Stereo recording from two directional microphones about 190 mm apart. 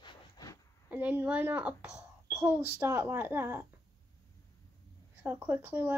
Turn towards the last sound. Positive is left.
turn(degrees=-10)  # may be behind; listen again after turning